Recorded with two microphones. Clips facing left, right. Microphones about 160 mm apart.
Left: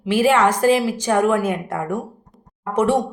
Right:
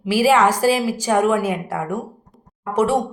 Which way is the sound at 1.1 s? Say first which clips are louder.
Even; 15° right (ahead or behind).